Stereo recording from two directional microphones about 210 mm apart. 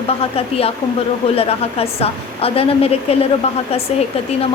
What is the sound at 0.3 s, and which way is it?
A woman's voice, 30° left (ahead or behind).